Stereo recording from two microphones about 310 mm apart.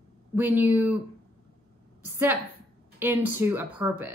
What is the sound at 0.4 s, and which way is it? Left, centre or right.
Speech, centre.